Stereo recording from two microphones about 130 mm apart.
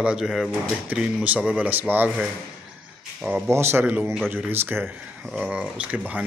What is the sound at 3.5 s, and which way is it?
Speech, 20° right (ahead or behind).